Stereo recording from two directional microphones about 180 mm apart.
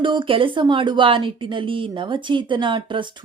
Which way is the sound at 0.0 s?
25° right (ahead or behind).